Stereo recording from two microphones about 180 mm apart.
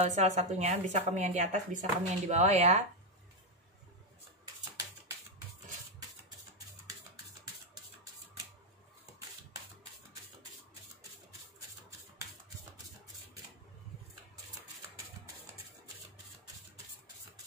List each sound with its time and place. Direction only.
0.0 s a woman's voice: 35° right (ahead or behind)